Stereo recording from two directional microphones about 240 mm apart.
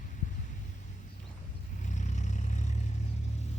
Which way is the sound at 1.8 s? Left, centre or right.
Left.